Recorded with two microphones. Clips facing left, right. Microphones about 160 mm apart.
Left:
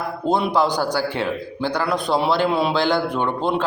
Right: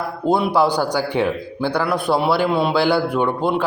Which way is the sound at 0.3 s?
10° right (ahead or behind).